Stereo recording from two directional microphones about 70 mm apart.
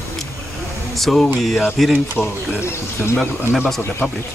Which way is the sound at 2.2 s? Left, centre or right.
Left.